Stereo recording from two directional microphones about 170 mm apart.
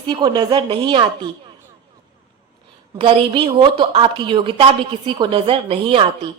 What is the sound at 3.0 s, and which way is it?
A woman's voice, 30° right (ahead or behind).